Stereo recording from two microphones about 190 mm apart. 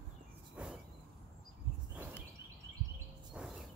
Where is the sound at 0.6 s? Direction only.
5° right (ahead or behind).